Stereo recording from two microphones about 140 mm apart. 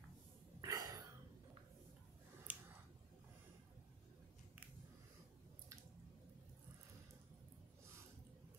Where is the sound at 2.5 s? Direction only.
10° right (ahead or behind).